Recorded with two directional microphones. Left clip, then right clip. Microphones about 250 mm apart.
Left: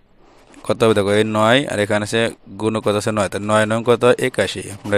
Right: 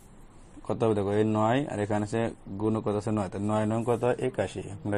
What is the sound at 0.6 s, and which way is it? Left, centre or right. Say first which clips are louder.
Speech: left 12 dB; left.